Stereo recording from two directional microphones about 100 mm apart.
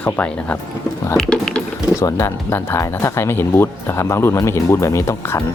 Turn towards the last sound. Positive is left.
turn(degrees=30)  # may be behind; listen again after turning